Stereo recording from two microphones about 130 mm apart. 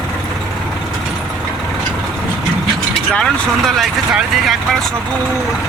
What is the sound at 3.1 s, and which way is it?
Speech, 5° left (ahead or behind).